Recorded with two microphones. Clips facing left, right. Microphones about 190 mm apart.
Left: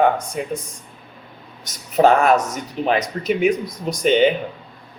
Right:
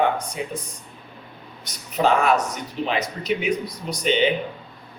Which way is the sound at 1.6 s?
45° left (ahead or behind).